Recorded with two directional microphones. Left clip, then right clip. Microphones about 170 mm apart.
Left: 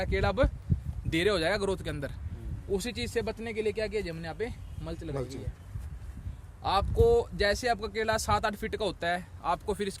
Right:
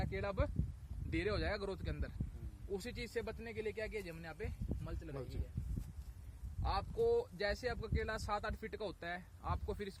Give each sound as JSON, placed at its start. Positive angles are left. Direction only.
{"t": 0.0, "sound": "speech", "side_deg": 25}
{"t": 6.6, "sound": "speech", "side_deg": 15}